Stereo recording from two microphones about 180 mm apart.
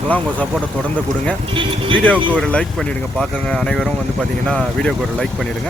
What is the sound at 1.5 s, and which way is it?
Speech, 30° right (ahead or behind).